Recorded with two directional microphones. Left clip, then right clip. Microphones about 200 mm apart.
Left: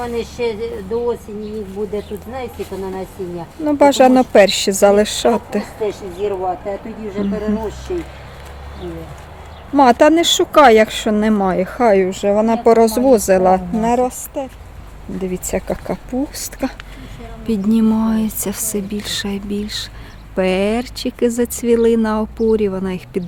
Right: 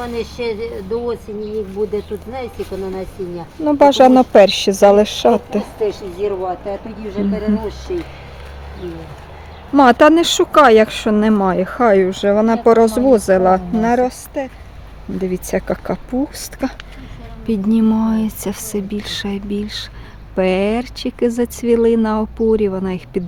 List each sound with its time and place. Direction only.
0.0 s speech: centre (ahead or behind)
2.3 s speech: 5° left (ahead or behind)
3.6 s speech: 15° right (ahead or behind)
5.8 s speech: centre (ahead or behind)
7.3 s speech: centre (ahead or behind)
9.7 s speech: 25° right (ahead or behind)